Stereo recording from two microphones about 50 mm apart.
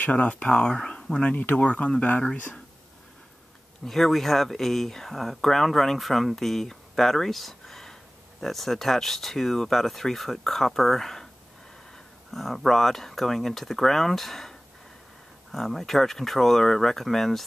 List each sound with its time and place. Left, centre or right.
0.0 s speech: left
3.8 s speech: centre
12.3 s speech: centre